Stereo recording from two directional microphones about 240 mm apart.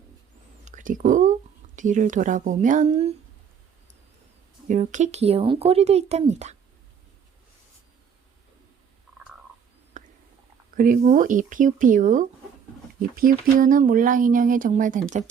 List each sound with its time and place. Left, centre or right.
0.6 s speech: right
4.7 s a woman's voice: right
10.0 s a sound: right
10.8 s speech: right